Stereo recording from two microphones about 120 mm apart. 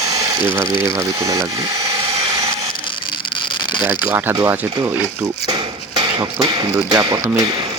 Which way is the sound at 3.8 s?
25° right (ahead or behind).